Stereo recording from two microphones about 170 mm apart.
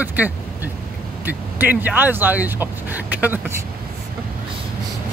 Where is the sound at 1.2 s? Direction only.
10° right (ahead or behind).